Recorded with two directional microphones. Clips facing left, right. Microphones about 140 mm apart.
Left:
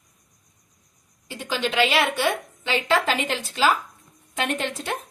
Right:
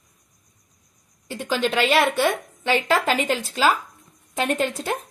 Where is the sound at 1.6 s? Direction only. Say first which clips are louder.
Right 2 dB; 45° right (ahead or behind).